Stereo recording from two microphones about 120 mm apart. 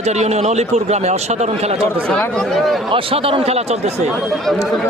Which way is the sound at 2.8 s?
50° right (ahead or behind).